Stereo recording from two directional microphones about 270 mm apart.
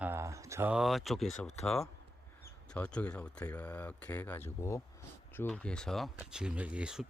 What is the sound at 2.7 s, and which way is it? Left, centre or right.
Speech, centre.